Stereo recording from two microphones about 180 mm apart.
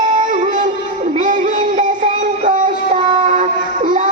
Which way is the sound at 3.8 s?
45° right (ahead or behind).